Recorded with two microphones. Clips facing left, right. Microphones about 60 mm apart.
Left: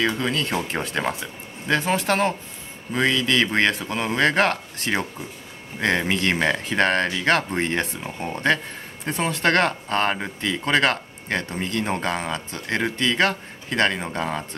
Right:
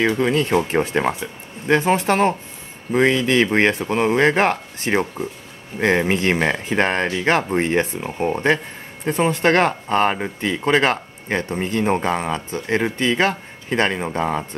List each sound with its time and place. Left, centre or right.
0.0 s speech: right
10.4 s speech: right